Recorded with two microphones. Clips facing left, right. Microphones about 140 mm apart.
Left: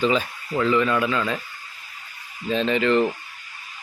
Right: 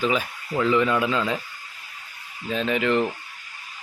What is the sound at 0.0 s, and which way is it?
Speech, 5° right (ahead or behind).